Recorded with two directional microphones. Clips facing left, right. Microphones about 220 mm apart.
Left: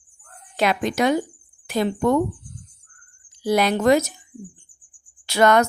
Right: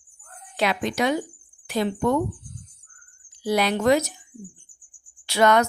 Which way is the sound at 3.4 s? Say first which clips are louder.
Left 3 dB; 45° left (ahead or behind).